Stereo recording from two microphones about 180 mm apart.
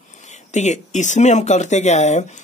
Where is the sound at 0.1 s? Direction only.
40° left (ahead or behind).